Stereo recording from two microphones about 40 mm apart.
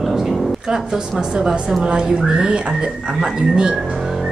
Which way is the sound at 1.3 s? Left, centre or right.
Right.